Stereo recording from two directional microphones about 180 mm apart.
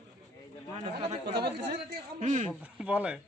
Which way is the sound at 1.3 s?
70° right (ahead or behind).